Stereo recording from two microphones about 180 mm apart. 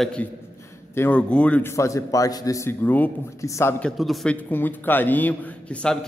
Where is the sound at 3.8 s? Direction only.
Centre (ahead or behind).